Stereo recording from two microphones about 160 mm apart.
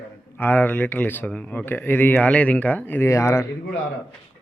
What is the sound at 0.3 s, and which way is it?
Speech, 10° left (ahead or behind).